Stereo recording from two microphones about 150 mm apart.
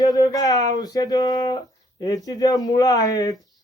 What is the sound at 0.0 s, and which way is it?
Speech, 25° left (ahead or behind).